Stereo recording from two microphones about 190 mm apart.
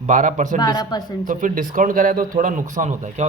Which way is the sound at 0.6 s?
20° left (ahead or behind).